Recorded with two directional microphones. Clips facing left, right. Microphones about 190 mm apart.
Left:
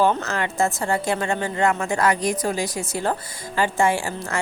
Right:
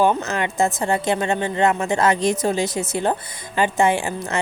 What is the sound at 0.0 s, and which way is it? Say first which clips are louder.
Speech: right 2 dB; 15° right (ahead or behind).